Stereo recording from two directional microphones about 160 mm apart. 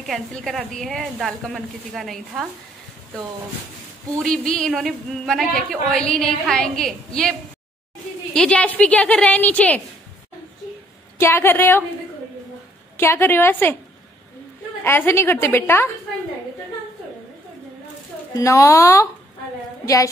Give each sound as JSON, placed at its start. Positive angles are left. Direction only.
{"t": 0.0, "sound": "a woman's voice", "side_deg": 0}
{"t": 4.2, "sound": "a woman's voice", "side_deg": 5}
{"t": 11.1, "sound": "a woman's voice", "side_deg": 15}
{"t": 12.9, "sound": "a woman's voice", "side_deg": 15}
{"t": 14.8, "sound": "a woman's voice", "side_deg": 15}
{"t": 18.3, "sound": "a woman's voice", "side_deg": 20}